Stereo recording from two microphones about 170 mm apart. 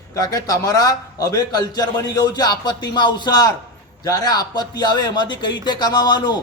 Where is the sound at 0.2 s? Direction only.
20° left (ahead or behind).